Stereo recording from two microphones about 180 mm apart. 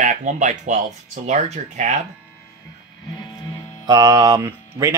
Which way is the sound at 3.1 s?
25° left (ahead or behind).